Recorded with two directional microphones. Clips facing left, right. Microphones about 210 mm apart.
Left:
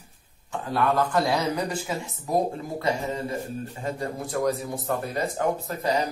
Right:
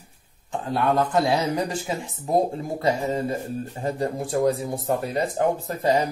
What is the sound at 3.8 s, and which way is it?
Speech, 30° right (ahead or behind).